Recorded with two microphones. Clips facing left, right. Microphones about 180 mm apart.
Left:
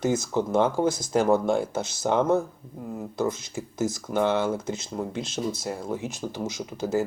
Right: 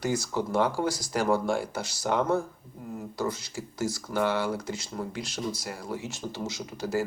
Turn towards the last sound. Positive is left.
turn(degrees=20)  # may be behind; listen again after turning